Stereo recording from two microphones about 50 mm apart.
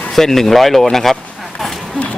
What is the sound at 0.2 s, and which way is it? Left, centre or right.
Speech, centre.